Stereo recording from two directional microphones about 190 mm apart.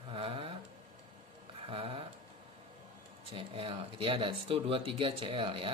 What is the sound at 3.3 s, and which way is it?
Speech, 30° right (ahead or behind).